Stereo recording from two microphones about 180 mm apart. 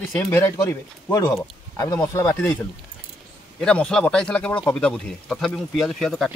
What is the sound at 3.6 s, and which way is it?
Speech, 5° left (ahead or behind).